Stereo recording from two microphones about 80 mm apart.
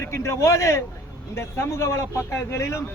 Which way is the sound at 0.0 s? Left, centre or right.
Left.